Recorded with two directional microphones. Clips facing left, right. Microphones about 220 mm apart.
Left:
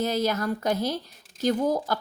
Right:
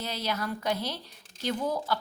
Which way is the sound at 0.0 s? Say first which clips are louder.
Left 8 dB; 45° left (ahead or behind).